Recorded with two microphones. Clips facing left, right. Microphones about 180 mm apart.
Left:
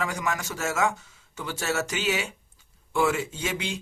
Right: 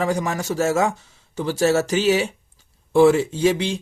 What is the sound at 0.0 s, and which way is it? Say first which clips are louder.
Speech: right 7 dB; 35° right (ahead or behind).